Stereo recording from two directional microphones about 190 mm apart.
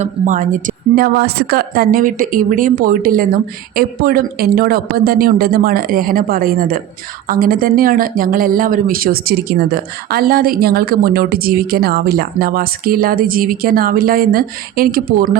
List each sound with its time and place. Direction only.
0.0 s speech: 40° right (ahead or behind)